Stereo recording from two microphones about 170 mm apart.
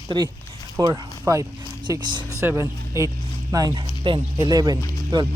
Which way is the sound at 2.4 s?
15° right (ahead or behind).